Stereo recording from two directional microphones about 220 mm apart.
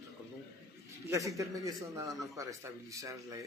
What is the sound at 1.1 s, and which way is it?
Speech, 15° right (ahead or behind).